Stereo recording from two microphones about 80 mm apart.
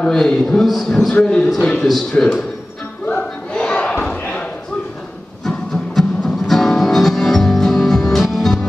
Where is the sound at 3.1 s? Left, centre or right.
Centre.